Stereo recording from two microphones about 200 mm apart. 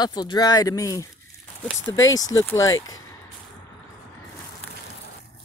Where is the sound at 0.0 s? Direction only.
20° left (ahead or behind).